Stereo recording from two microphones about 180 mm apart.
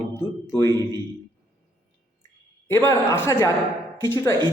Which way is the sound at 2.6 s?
15° left (ahead or behind).